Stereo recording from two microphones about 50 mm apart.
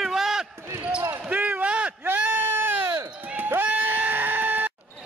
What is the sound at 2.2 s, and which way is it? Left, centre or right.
Sheep, right.